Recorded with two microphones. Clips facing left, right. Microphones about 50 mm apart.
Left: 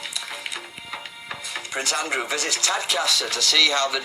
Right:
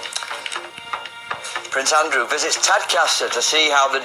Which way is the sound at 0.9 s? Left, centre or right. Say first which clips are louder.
Right 7 dB; right.